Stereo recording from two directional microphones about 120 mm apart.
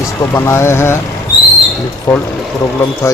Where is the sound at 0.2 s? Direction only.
25° left (ahead or behind).